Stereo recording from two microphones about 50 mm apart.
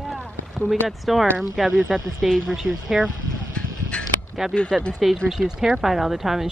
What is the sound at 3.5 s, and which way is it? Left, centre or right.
Music, left.